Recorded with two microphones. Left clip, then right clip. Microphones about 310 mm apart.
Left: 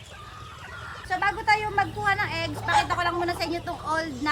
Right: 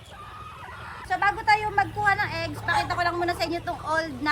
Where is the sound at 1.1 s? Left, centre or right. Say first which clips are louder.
Right 1 dB; centre.